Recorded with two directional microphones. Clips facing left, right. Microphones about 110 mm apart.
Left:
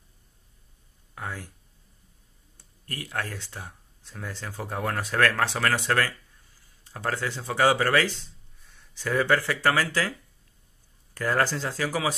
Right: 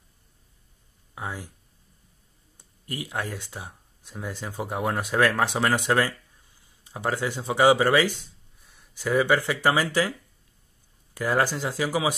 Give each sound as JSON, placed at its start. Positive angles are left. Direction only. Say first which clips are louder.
{"t": 1.1, "sound": "a sound", "louder": "right 2 dB", "side_deg": -15}
{"t": 2.5, "sound": "speech", "louder": "right 4 dB", "side_deg": -15}
{"t": 11.1, "sound": "speech", "louder": "right 1 dB", "side_deg": -15}